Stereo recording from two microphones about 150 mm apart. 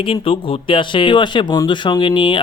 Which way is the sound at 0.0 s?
35° left (ahead or behind).